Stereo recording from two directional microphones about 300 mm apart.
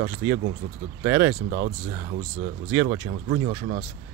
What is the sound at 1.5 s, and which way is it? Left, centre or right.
Speech, right.